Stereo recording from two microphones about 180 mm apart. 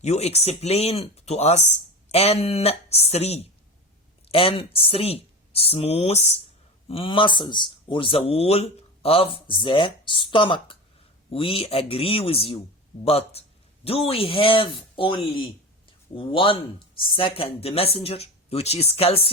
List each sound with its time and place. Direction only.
0.0 s speech: 35° left (ahead or behind)